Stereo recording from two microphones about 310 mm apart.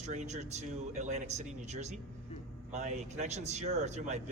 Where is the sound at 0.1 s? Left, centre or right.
Right.